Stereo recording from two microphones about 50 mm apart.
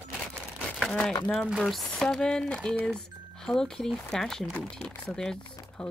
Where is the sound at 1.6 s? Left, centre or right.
Centre.